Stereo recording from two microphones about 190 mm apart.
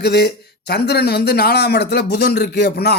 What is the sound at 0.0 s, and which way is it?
Speech, 60° left (ahead or behind).